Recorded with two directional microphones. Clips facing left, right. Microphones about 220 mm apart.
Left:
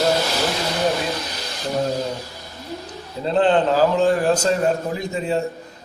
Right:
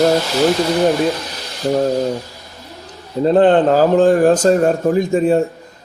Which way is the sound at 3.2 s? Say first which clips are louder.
Right 6 dB; 50° right (ahead or behind).